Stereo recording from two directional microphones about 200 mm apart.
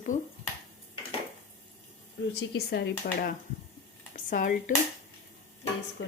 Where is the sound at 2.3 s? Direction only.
55° left (ahead or behind).